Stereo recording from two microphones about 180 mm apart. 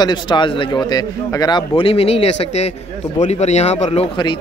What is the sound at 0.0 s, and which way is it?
A man's voice, 25° left (ahead or behind).